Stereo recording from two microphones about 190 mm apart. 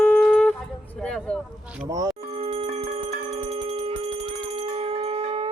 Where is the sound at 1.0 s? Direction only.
5° left (ahead or behind).